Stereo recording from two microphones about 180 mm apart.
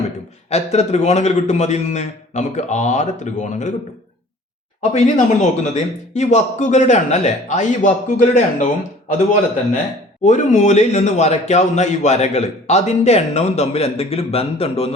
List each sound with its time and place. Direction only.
0.5 s speech: 35° left (ahead or behind)
4.8 s speech: 45° left (ahead or behind)
10.2 s speech: 45° left (ahead or behind)